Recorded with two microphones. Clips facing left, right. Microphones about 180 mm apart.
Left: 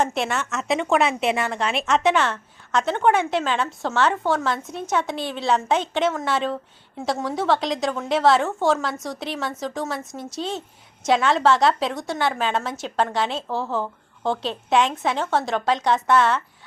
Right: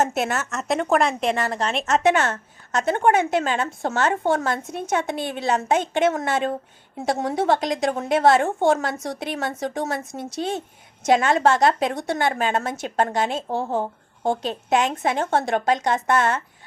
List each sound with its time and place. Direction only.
0.0 s a woman's voice: 45° right (ahead or behind)
0.3 s speech: centre (ahead or behind)
1.4 s a woman's voice: 40° right (ahead or behind)